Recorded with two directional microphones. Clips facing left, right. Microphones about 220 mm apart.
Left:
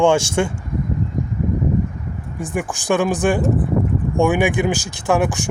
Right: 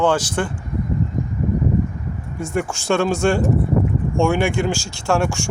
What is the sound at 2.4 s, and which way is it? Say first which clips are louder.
Speech: right 1 dB; 15° left (ahead or behind).